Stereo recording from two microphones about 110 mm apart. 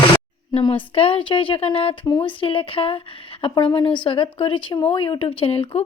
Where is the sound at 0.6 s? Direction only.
55° left (ahead or behind).